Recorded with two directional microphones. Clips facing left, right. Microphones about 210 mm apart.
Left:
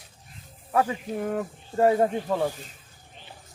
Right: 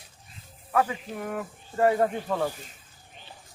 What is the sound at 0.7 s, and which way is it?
Speech, 30° left (ahead or behind).